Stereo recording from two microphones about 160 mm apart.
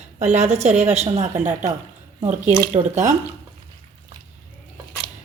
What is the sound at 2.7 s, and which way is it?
Speech, 50° right (ahead or behind).